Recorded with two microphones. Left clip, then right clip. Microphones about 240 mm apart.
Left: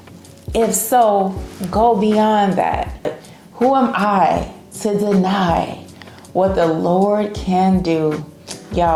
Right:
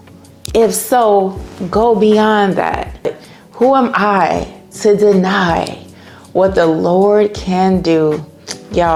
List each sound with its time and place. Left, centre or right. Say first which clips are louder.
0.5 s speech: right 3 dB; right